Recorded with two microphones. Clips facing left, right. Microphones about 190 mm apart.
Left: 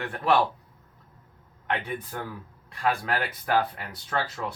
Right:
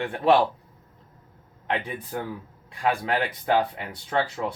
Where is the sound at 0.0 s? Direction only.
25° right (ahead or behind).